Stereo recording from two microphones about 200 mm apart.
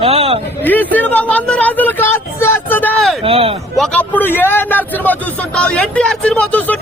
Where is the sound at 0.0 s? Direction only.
30° right (ahead or behind).